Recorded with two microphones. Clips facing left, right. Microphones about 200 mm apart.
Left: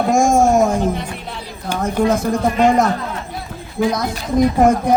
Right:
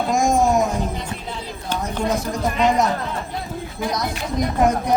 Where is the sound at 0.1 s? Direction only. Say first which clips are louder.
Left 4 dB; 45° left (ahead or behind).